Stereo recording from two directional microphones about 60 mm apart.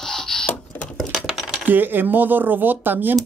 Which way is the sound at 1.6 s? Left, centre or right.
Right.